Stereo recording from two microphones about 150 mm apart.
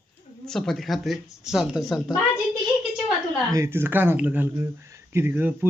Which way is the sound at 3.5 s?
15° right (ahead or behind).